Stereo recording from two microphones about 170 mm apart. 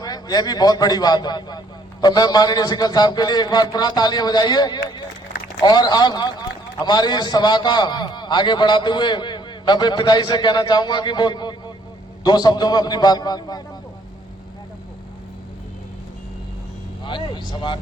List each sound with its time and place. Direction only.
0.0 s a man's voice: 25° left (ahead or behind)
17.0 s a man's voice: 30° left (ahead or behind)